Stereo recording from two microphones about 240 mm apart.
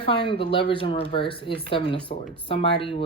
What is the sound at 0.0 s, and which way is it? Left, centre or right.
Speech, left.